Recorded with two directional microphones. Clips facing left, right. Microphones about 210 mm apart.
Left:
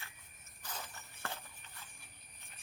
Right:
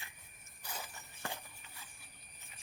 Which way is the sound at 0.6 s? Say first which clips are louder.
Even; 10° right (ahead or behind).